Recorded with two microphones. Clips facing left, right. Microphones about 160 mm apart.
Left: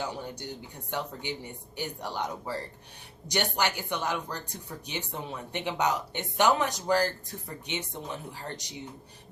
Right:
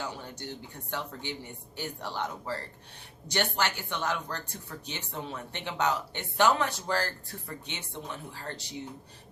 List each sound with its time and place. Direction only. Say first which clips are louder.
0.1 s speech: left 3 dB; 15° left (ahead or behind)